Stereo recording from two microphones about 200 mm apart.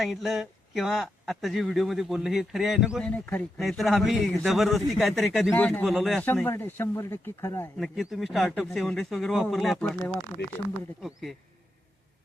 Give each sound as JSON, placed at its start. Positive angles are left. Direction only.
{"t": 0.0, "sound": "speech", "side_deg": 0}
{"t": 3.1, "sound": "speech", "side_deg": 10}
{"t": 7.8, "sound": "speech", "side_deg": 0}